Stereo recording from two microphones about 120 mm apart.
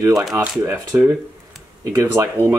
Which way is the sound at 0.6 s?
15° right (ahead or behind).